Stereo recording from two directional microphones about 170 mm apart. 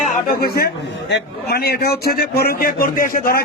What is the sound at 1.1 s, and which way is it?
A man's voice, 65° left (ahead or behind).